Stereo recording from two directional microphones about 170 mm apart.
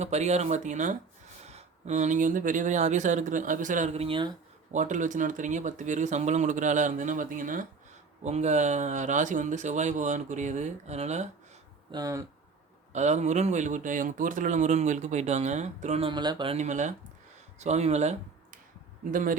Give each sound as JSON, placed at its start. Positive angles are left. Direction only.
{"t": 0.0, "sound": "speech", "side_deg": -40}
{"t": 4.7, "sound": "speech", "side_deg": -45}
{"t": 11.9, "sound": "speech", "side_deg": -20}
{"t": 12.9, "sound": "speech", "side_deg": -45}
{"t": 16.6, "sound": "speech", "side_deg": -45}
{"t": 19.1, "sound": "speech", "side_deg": -50}